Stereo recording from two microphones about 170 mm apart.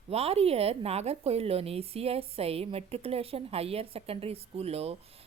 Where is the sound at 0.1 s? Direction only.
35° right (ahead or behind).